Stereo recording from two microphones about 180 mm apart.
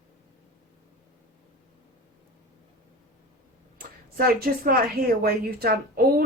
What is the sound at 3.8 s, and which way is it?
Speech, 55° right (ahead or behind).